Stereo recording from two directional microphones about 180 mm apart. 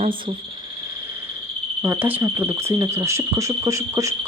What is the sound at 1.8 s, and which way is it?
Speech, 10° right (ahead or behind).